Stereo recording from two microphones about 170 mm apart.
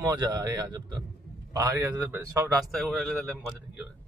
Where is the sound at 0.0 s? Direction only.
20° right (ahead or behind).